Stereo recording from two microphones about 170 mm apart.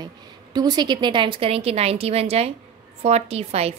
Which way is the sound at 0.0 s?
25° right (ahead or behind).